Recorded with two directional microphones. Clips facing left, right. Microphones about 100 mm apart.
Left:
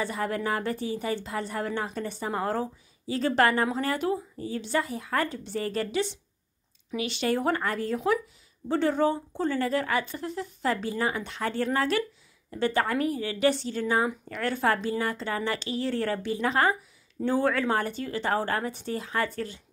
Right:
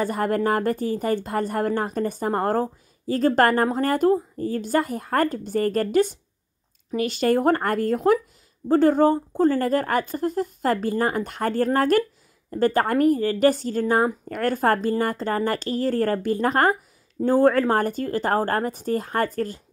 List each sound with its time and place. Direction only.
0.0 s a woman's voice: 45° right (ahead or behind)